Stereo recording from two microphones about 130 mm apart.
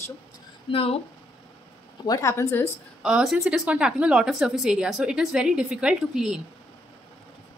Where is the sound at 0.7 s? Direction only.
45° left (ahead or behind).